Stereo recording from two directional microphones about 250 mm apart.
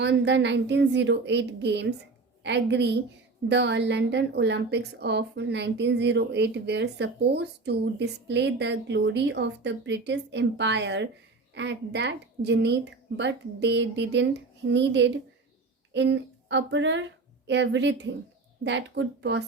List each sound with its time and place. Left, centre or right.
0.0 s a woman's voice: right